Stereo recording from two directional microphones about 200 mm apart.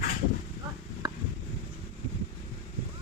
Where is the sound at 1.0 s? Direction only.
20° right (ahead or behind).